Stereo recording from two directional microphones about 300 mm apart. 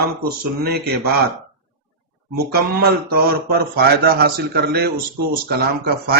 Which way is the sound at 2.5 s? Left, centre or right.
Right.